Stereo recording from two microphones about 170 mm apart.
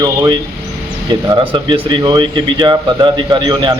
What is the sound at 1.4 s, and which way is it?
Speech, 30° right (ahead or behind).